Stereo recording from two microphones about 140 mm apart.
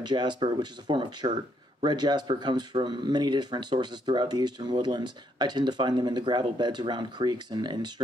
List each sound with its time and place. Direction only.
0.0 s speech: 30° right (ahead or behind)